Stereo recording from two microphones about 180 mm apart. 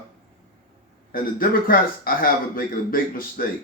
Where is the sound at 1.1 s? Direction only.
50° left (ahead or behind).